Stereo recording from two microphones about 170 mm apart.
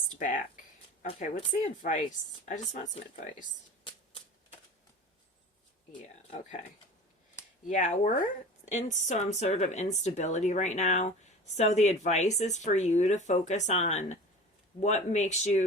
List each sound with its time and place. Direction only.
0.2 s speech: 50° left (ahead or behind)
1.0 s speech: 35° left (ahead or behind)
1.8 s speech: 45° left (ahead or behind)
7.7 s speech: 45° left (ahead or behind)